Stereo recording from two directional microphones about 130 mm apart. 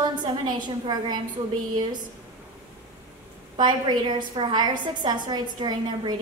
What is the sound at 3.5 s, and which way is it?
A woman's voice, 35° right (ahead or behind).